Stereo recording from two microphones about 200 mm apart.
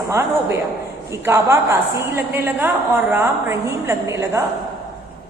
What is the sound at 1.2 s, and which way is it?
A woman's voice, 15° right (ahead or behind).